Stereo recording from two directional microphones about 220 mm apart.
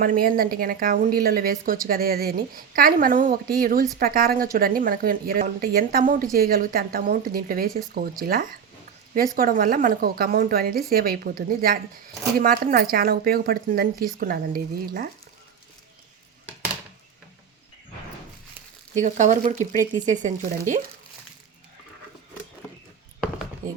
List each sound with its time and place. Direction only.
0.0 s speech: 40° right (ahead or behind)
18.9 s speech: 35° right (ahead or behind)